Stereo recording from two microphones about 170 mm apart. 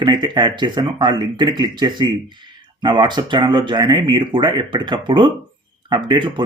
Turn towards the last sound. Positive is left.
turn(degrees=-25)  # may be behind; listen again after turning